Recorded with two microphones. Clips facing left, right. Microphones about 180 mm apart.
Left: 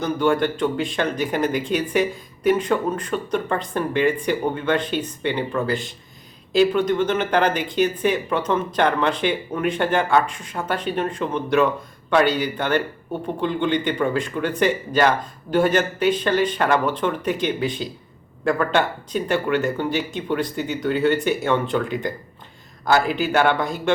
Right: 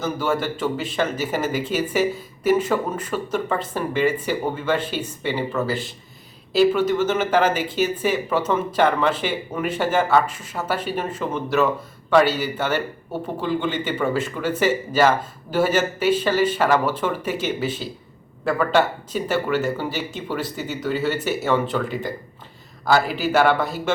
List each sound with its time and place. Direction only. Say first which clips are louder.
0.0 s speech: left 4 dB; 5° right (ahead or behind)